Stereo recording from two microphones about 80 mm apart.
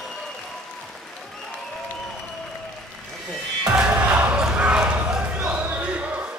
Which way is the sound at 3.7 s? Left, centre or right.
Centre.